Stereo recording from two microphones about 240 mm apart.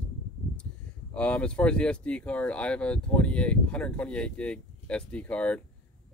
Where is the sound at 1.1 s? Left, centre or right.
Centre.